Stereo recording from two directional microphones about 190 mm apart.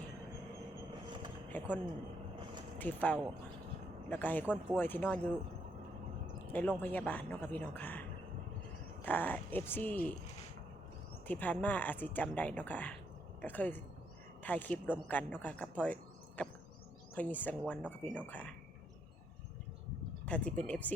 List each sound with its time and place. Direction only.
1.5 s speech: 10° left (ahead or behind)
2.7 s speech: 10° left (ahead or behind)
6.5 s speech: 10° left (ahead or behind)
11.3 s speech: 10° left (ahead or behind)
20.2 s speech: 5° left (ahead or behind)